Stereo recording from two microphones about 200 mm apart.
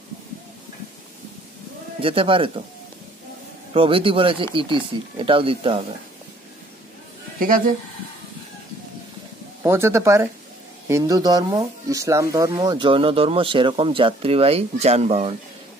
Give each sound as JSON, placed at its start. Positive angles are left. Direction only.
{"t": 2.0, "sound": "speech", "side_deg": -25}
{"t": 3.7, "sound": "speech", "side_deg": -25}
{"t": 7.3, "sound": "a man's voice", "side_deg": -45}
{"t": 9.6, "sound": "speech", "side_deg": -10}